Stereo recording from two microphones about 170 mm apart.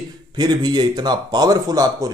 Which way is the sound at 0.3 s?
25° right (ahead or behind).